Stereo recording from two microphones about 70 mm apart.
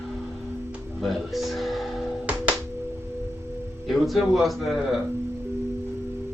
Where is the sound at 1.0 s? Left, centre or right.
Centre.